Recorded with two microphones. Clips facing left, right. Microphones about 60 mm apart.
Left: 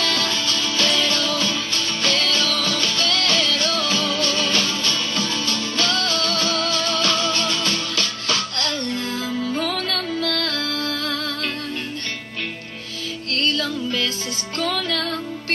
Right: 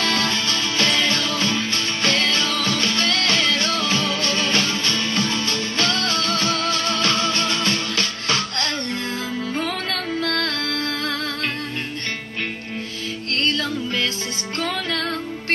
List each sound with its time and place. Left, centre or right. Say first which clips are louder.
0.0 s music: right 1 dB; right
13.3 s music: even; right